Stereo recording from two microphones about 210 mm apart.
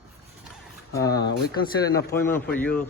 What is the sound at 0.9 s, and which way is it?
Speech, 15° left (ahead or behind).